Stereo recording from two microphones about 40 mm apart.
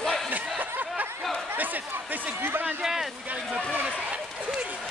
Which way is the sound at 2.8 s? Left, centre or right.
Centre.